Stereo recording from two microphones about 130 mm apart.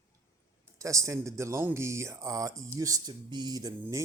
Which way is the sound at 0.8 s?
25° right (ahead or behind).